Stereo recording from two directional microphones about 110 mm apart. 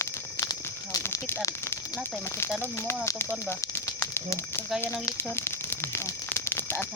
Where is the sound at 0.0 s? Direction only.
25° left (ahead or behind).